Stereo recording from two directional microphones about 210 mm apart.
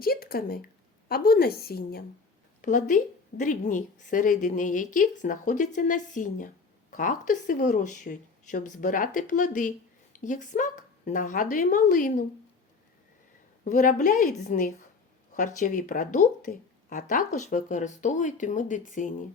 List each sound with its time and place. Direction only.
0.0 s a woman's voice: 45° left (ahead or behind)
13.7 s speech: 40° left (ahead or behind)